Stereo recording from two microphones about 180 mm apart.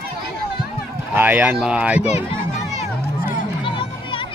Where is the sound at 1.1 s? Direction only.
10° right (ahead or behind).